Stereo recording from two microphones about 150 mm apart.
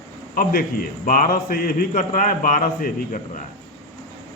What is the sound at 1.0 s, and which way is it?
Speech, 65° left (ahead or behind).